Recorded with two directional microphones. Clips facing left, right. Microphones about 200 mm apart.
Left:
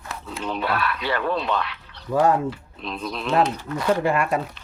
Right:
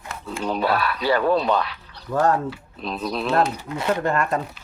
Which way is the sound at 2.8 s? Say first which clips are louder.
Right 4 dB; 40° right (ahead or behind).